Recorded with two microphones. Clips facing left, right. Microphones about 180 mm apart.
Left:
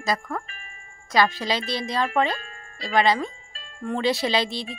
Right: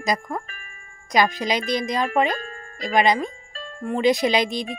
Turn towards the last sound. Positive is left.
turn(degrees=-15)  # may be behind; listen again after turning